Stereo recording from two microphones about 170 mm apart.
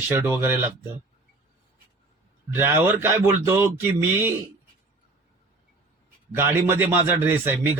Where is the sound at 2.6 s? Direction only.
15° right (ahead or behind).